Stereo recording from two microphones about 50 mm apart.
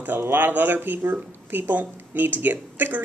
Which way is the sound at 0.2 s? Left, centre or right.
Right.